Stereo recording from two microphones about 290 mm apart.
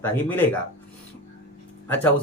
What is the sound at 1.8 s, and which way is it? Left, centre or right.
Speech, centre.